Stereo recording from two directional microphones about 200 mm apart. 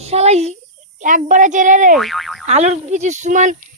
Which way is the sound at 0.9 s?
40° right (ahead or behind).